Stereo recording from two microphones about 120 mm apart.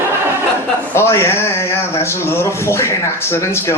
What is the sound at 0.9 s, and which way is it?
Speech, 20° left (ahead or behind).